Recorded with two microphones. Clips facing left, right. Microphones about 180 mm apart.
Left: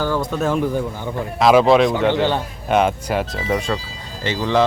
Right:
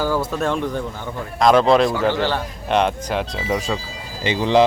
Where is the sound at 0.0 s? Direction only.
5° right (ahead or behind).